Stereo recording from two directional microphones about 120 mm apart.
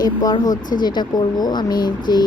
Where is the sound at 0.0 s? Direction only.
30° left (ahead or behind).